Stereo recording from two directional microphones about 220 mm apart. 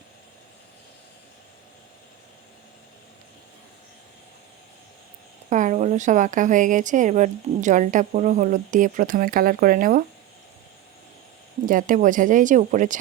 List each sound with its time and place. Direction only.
5.5 s a woman's voice: 35° right (ahead or behind)
11.6 s a woman's voice: 40° right (ahead or behind)